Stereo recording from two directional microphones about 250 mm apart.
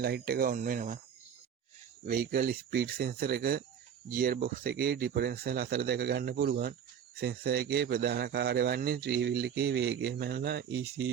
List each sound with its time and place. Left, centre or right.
0.0 s speech: right
2.0 s speech: right